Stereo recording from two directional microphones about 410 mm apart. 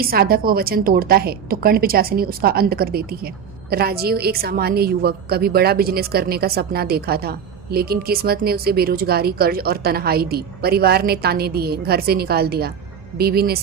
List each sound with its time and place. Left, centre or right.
0.0 s a woman's voice: right